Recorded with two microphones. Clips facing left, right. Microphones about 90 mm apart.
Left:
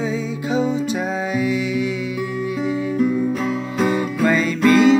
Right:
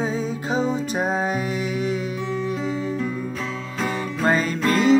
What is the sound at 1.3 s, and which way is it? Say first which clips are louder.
Music: left 5 dB; 40° right (ahead or behind).